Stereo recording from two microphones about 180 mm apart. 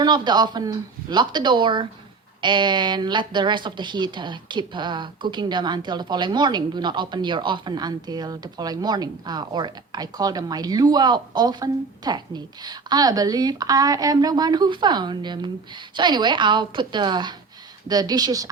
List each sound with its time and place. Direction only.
0.0 s speech: 25° right (ahead or behind)